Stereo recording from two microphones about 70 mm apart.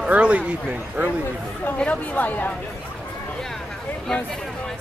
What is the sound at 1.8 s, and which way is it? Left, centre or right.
Speech, left.